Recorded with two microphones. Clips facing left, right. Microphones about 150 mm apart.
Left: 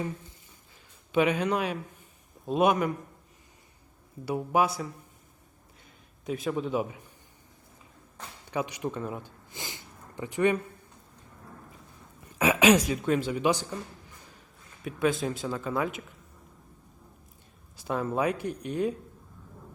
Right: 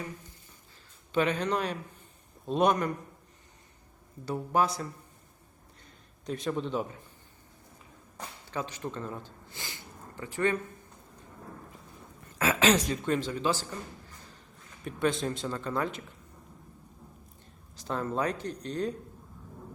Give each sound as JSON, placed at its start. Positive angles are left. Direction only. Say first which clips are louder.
{"t": 1.1, "sound": "speech", "louder": "left 3 dB", "side_deg": 10}
{"t": 4.3, "sound": "speech", "louder": "left 2 dB", "side_deg": 10}
{"t": 6.2, "sound": "speech", "louder": "left 2 dB", "side_deg": 5}
{"t": 8.4, "sound": "a man's voice", "louder": "left 5 dB", "side_deg": 15}
{"t": 12.4, "sound": "speech", "louder": "left 4 dB", "side_deg": 15}
{"t": 14.8, "sound": "speech", "louder": "left 2 dB", "side_deg": 5}
{"t": 17.7, "sound": "speech", "louder": "left 3 dB", "side_deg": 10}